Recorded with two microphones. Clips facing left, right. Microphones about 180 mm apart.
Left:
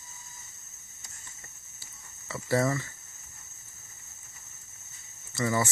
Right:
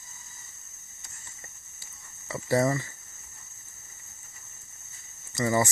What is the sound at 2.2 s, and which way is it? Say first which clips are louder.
Speech: right 2 dB; 15° right (ahead or behind).